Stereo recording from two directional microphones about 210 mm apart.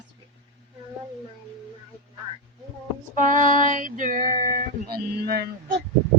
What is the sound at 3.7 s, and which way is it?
Music, 40° right (ahead or behind).